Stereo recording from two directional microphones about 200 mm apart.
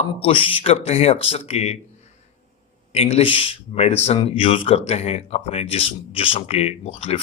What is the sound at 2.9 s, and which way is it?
A man's voice, 30° left (ahead or behind).